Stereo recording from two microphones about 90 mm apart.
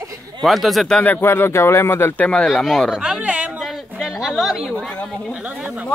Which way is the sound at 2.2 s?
10° left (ahead or behind).